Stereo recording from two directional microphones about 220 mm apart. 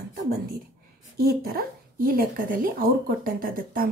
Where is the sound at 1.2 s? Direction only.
45° right (ahead or behind).